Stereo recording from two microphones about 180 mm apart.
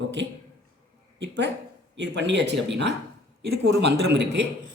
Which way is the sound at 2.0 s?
75° right (ahead or behind).